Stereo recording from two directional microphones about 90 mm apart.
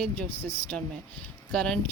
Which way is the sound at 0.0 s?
15° left (ahead or behind).